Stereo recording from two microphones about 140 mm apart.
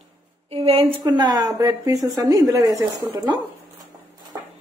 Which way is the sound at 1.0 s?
30° right (ahead or behind).